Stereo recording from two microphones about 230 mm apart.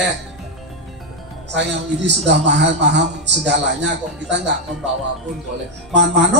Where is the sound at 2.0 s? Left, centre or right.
Right.